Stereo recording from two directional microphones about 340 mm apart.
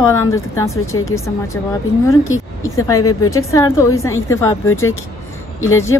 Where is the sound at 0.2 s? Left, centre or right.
Centre.